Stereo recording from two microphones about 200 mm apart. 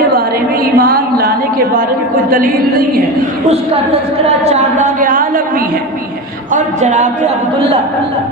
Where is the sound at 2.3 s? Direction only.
45° right (ahead or behind).